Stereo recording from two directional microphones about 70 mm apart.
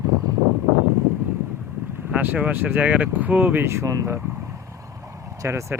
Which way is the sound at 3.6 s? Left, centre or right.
Right.